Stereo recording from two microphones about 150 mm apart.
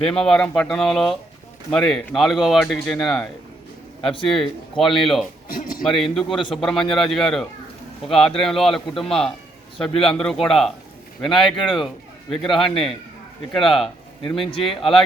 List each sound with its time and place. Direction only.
0.0 s speech: 5° left (ahead or behind)
4.8 s speech: centre (ahead or behind)
5.5 s a sound: 70° left (ahead or behind)
5.8 s speech: centre (ahead or behind)
14.2 s speech: 35° left (ahead or behind)